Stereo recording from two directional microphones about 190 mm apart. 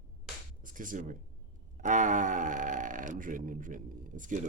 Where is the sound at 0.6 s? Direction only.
45° right (ahead or behind).